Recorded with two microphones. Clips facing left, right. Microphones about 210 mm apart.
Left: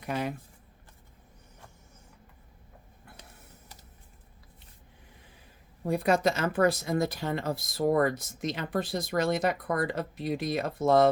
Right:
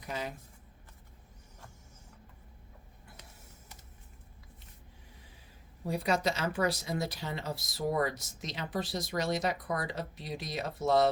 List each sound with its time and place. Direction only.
0.0 s speech: 60° left (ahead or behind)
5.8 s speech: 50° left (ahead or behind)